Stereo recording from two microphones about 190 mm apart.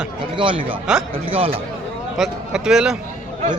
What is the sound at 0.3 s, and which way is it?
A man's voice, 25° right (ahead or behind).